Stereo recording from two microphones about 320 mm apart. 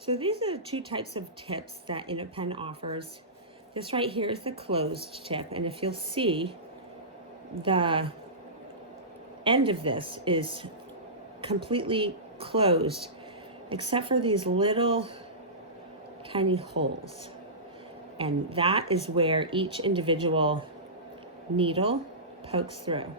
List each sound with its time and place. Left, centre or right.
0.0 s a woman's voice: centre
7.6 s a woman's voice: centre
9.4 s a woman's voice: centre
16.3 s a woman's voice: centre
18.2 s a woman's voice: centre